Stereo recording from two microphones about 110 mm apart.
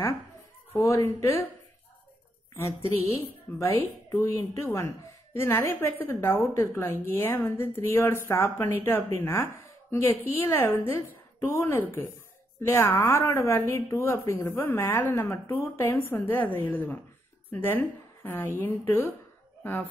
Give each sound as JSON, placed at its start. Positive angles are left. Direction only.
{"t": 0.7, "sound": "a woman's voice", "side_deg": 25}
{"t": 3.5, "sound": "a woman's voice", "side_deg": 15}
{"t": 4.1, "sound": "a woman's voice", "side_deg": 25}